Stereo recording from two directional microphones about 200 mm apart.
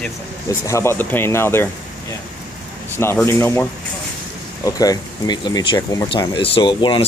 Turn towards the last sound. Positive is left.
turn(degrees=25)  # may be behind; listen again after turning